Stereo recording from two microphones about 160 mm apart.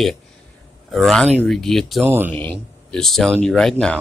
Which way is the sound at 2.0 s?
15° right (ahead or behind).